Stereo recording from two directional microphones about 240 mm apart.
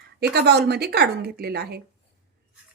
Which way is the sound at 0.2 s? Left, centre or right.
Right.